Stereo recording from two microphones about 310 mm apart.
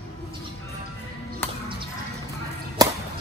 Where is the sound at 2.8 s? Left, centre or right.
Centre.